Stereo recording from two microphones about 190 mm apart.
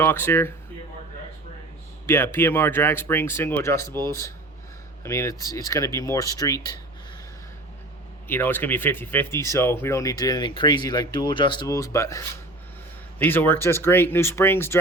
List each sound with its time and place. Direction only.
0.0 s speech: 10° left (ahead or behind)
2.0 s speech: 10° left (ahead or behind)
5.0 s speech: 15° left (ahead or behind)
8.3 s speech: 10° left (ahead or behind)